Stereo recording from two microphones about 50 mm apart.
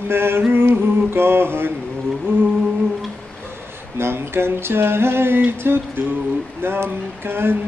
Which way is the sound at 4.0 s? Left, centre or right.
Right.